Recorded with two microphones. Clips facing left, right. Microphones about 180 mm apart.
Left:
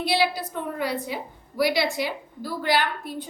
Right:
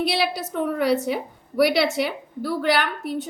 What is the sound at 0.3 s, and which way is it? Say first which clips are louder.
Speech: right 6 dB; 80° right.